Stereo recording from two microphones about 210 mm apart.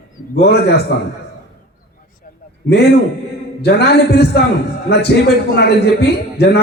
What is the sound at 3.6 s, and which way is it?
A man's voice, 50° left (ahead or behind).